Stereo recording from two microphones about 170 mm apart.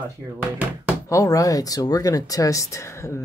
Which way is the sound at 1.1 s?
20° left (ahead or behind).